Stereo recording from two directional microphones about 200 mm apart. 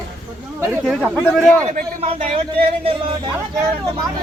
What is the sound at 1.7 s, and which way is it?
Speech, 30° right (ahead or behind).